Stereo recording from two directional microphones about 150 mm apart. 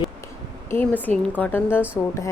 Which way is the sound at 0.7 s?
10° left (ahead or behind).